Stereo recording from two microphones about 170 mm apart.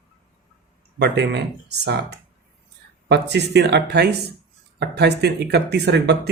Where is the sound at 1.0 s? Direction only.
80° right.